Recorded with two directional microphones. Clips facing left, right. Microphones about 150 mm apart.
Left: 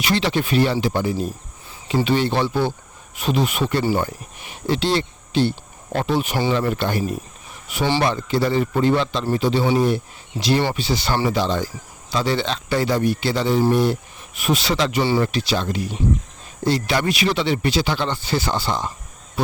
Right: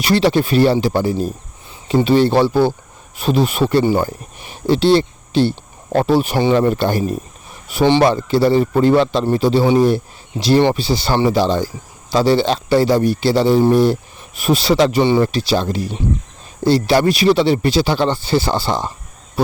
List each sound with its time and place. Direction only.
0.0 s speech: 40° right (ahead or behind)
8.0 s speech: 35° right (ahead or behind)